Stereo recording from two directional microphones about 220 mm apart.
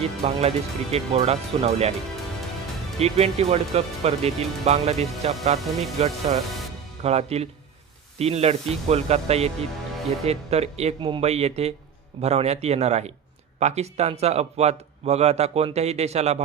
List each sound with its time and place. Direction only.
0.0 s speech: 30° right (ahead or behind)
3.0 s speech: 30° right (ahead or behind)